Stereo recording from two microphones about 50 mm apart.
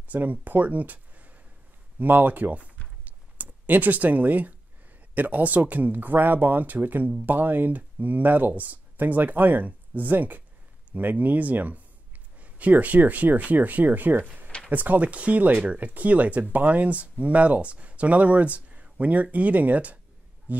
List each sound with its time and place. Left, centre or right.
0.1 s speech: right
2.0 s a sound: right
5.1 s speech: right